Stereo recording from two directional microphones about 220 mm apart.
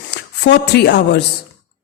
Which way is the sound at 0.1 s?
50° left (ahead or behind).